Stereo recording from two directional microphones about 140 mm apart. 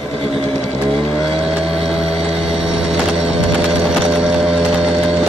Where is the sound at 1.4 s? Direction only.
5° right (ahead or behind).